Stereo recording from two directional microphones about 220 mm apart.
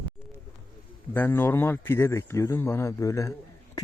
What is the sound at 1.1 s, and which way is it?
Speech, 10° left (ahead or behind).